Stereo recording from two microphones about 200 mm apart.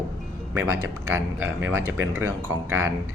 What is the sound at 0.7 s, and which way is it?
Speech, 90° right.